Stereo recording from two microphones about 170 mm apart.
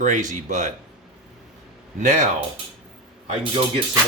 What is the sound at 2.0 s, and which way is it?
Speech, 45° right (ahead or behind).